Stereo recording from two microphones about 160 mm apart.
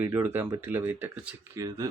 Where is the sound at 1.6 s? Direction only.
25° right (ahead or behind).